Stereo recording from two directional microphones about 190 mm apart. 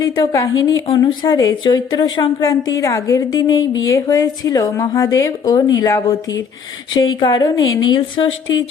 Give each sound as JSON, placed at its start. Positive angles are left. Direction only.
{"t": 0.0, "sound": "a woman's voice", "side_deg": 20}
{"t": 7.2, "sound": "a woman's voice", "side_deg": 25}